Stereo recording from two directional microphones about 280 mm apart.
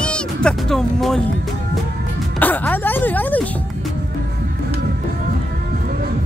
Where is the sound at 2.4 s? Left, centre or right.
Centre.